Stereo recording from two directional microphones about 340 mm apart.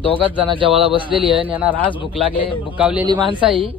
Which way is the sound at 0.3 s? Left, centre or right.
Centre.